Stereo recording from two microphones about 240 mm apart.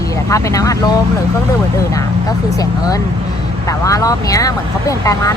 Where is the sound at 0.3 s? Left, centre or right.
Centre.